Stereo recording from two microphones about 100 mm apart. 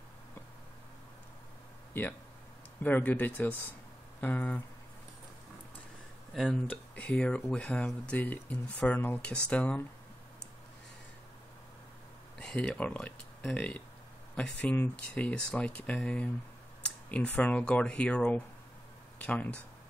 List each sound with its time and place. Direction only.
2.0 s speech: 20° left (ahead or behind)
6.3 s speech: centre (ahead or behind)
6.7 s speech: 15° left (ahead or behind)
12.4 s speech: 10° left (ahead or behind)